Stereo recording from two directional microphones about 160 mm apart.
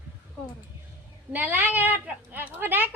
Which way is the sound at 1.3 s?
10° right (ahead or behind).